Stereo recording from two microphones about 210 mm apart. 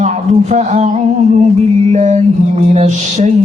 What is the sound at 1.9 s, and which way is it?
Music, 35° right (ahead or behind).